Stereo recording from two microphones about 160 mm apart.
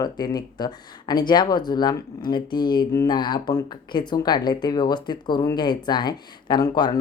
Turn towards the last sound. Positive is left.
turn(degrees=25)  # may be behind; listen again after turning